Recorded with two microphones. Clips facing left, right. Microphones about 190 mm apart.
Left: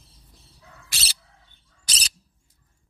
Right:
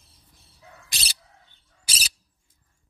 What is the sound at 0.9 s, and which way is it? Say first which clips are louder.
Bird: left 2 dB; 15° right (ahead or behind).